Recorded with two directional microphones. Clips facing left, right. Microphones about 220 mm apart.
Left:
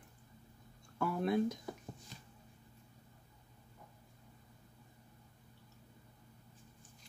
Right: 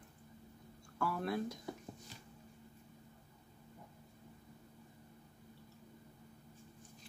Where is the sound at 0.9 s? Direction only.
20° left (ahead or behind).